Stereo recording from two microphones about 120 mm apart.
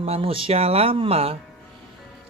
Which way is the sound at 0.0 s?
55° right (ahead or behind).